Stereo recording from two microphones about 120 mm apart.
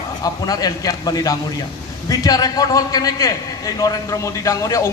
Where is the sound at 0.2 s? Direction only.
30° left (ahead or behind).